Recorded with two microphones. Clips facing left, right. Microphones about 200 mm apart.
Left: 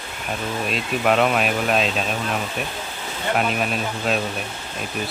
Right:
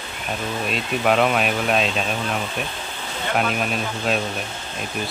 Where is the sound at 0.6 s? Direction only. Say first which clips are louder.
Even; centre (ahead or behind).